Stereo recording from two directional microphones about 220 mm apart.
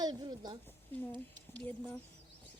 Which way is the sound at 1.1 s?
10° left (ahead or behind).